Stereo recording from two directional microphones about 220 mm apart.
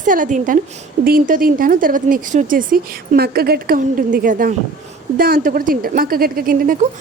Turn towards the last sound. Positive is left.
turn(degrees=-40)  # may be behind; listen again after turning